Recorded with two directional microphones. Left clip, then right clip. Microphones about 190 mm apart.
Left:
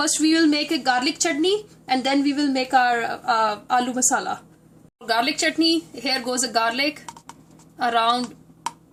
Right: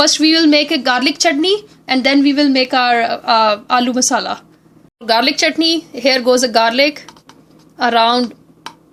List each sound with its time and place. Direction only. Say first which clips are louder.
0.0 s a woman's voice: right 8 dB; 40° right (ahead or behind)